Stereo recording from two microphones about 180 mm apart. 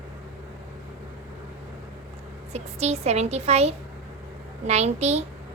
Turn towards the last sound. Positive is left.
turn(degrees=-35)  # may be behind; listen again after turning